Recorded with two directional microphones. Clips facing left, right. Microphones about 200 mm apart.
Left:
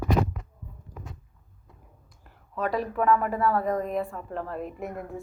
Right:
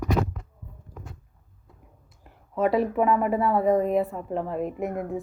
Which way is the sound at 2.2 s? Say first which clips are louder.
Right 6 dB; 25° right (ahead or behind).